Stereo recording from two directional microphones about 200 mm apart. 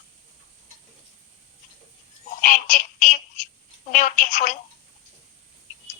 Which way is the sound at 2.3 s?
40° left (ahead or behind).